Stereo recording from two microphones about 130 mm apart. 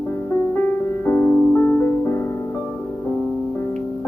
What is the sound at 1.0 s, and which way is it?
Music, 15° left (ahead or behind).